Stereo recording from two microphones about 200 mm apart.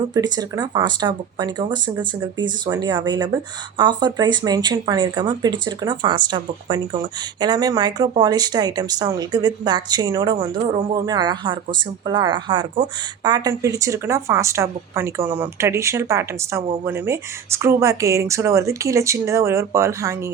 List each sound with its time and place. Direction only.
0.1 s speech: 20° right (ahead or behind)